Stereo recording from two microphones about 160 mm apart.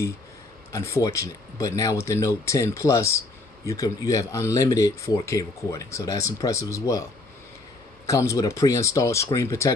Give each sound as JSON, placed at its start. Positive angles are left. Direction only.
{"t": 0.7, "sound": "speech", "side_deg": 15}
{"t": 8.1, "sound": "speech", "side_deg": 20}